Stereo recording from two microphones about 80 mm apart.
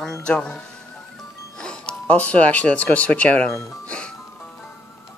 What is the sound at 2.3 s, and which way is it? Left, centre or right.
A woman's voice, centre.